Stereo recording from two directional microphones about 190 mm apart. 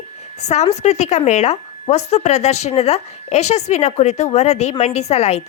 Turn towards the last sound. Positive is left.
turn(degrees=35)  # may be behind; listen again after turning